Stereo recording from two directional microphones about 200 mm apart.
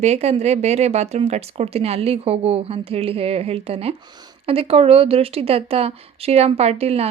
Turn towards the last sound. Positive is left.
turn(degrees=-30)  # may be behind; listen again after turning